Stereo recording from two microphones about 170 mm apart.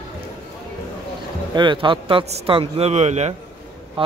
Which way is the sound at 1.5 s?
30° right (ahead or behind).